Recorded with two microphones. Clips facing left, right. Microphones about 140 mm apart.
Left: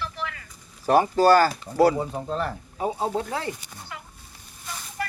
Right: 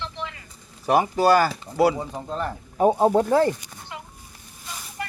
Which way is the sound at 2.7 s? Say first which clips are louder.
Right 10 dB; 50° right (ahead or behind).